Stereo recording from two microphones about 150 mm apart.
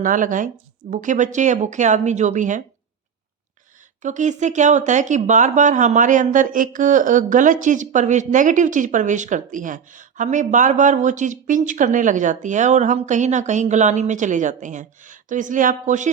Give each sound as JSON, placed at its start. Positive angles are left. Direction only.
{"t": 0.0, "sound": "speech", "side_deg": -60}
{"t": 4.0, "sound": "speech", "side_deg": -55}